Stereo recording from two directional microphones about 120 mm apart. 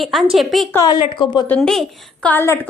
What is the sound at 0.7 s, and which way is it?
Speech, 35° left (ahead or behind).